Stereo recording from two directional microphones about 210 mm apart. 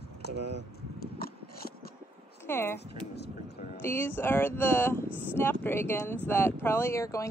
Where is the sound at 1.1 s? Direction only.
45° left (ahead or behind).